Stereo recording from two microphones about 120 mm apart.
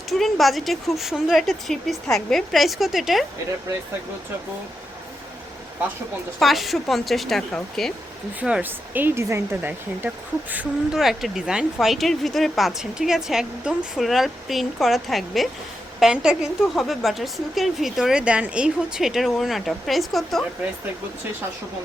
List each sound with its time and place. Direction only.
0.1 s speech: centre (ahead or behind)
6.4 s speech: centre (ahead or behind)
8.4 s speech: 10° right (ahead or behind)
10.9 s speech: centre (ahead or behind)